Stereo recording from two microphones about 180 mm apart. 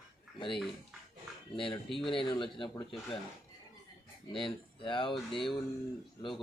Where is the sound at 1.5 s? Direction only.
30° left (ahead or behind).